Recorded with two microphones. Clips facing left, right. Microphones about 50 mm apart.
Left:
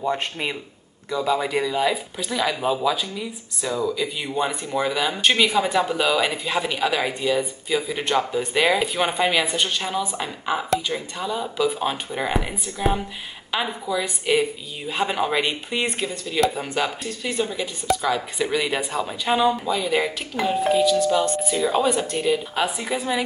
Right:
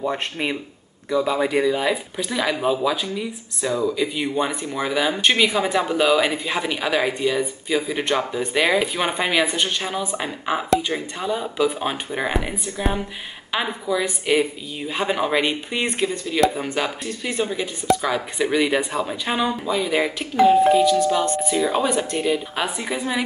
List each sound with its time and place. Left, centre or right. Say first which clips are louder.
0.0 s speech: even; centre
20.8 s speech: right 2 dB; right
21.5 s speech: right 1 dB; centre
21.8 s speech: even; right
22.2 s speech: left 1 dB; centre